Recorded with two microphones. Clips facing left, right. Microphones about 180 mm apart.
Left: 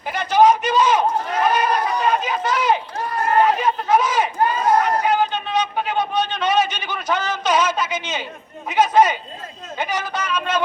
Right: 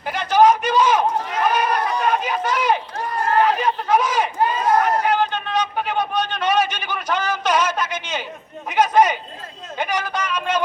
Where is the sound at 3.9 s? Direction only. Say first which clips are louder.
Left 1 dB; 10° right (ahead or behind).